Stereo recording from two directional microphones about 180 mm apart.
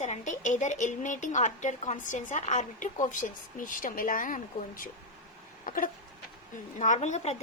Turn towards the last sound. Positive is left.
turn(degrees=35)  # may be behind; listen again after turning